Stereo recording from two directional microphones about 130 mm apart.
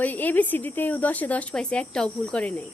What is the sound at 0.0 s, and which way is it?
Speech, 15° left (ahead or behind).